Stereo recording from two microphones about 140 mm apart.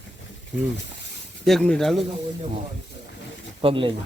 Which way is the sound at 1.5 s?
5° left (ahead or behind).